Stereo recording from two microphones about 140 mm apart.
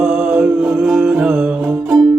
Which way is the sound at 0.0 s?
10° right (ahead or behind).